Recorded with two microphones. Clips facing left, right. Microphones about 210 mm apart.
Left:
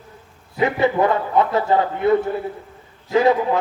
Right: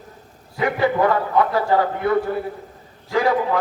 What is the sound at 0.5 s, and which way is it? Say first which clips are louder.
A man's voice: left 1 dB; 25° left (ahead or behind).